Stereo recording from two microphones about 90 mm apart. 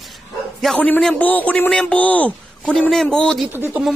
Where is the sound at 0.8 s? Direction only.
15° left (ahead or behind).